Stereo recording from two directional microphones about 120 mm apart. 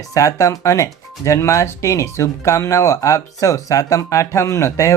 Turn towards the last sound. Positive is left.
turn(degrees=25)  # may be behind; listen again after turning